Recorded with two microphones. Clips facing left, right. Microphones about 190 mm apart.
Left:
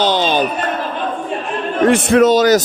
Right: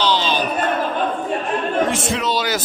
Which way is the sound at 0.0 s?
50° left (ahead or behind).